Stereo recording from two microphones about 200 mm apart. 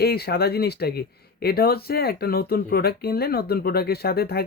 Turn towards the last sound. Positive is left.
turn(degrees=50)  # may be behind; listen again after turning